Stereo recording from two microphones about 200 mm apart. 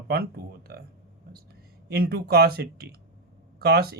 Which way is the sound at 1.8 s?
50° right (ahead or behind).